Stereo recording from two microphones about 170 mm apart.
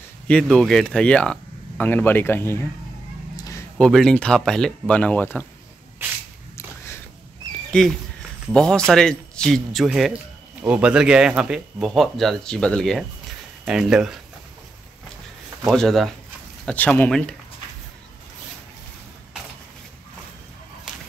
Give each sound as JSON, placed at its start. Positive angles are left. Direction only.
{"t": 0.3, "sound": "speech", "side_deg": 5}
{"t": 3.3, "sound": "a sound", "side_deg": 20}
{"t": 3.7, "sound": "speech", "side_deg": 5}
{"t": 6.5, "sound": "a sound", "side_deg": 15}
{"t": 7.7, "sound": "speech", "side_deg": 5}
{"t": 15.6, "sound": "speech", "side_deg": 0}